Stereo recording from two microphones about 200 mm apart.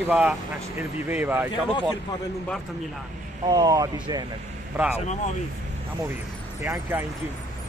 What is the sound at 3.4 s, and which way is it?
Speech, 20° right (ahead or behind).